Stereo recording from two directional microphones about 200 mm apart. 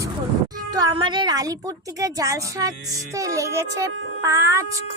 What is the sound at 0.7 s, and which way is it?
Speech, 20° right (ahead or behind).